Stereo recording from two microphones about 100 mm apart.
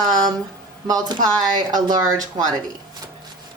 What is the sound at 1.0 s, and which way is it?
Speech, 40° right (ahead or behind).